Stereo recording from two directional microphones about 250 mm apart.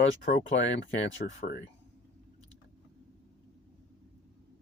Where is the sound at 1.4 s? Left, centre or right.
Left.